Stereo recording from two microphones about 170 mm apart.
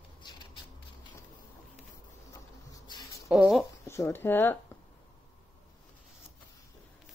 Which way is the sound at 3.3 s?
5° right (ahead or behind).